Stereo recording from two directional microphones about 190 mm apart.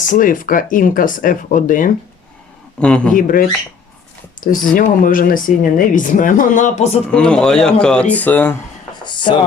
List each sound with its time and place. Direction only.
0.1 s speech: 45° left (ahead or behind)
2.8 s speech: 5° left (ahead or behind)
3.2 s speech: 45° left (ahead or behind)
4.7 s speech: 45° left (ahead or behind)
7.1 s speech: 5° left (ahead or behind)
9.0 s a sound: 25° left (ahead or behind)